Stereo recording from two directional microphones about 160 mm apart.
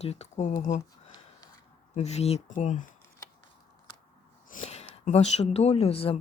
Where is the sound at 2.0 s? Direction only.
45° left (ahead or behind).